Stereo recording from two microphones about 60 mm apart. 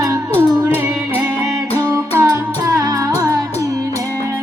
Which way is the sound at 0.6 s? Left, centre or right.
Right.